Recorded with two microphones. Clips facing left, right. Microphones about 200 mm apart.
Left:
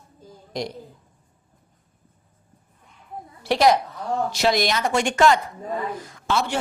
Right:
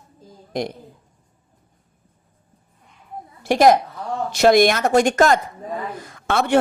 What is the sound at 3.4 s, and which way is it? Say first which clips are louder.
A woman's voice: right 4 dB; 50° right (ahead or behind).